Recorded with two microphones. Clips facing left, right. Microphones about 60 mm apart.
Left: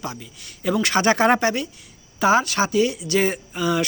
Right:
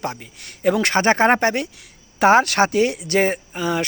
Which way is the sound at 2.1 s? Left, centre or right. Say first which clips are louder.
Right 4 dB; right.